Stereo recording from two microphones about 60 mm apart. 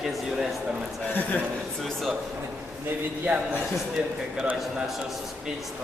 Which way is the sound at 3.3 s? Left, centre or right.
Right.